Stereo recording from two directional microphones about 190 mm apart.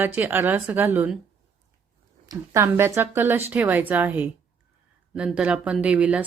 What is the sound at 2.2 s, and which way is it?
Speech, 15° right (ahead or behind).